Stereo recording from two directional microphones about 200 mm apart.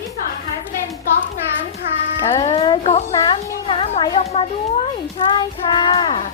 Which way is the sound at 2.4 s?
30° left (ahead or behind).